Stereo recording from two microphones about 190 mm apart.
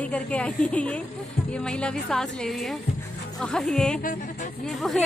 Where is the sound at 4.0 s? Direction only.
45° left (ahead or behind).